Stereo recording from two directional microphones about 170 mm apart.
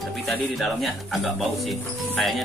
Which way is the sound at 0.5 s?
Centre (ahead or behind).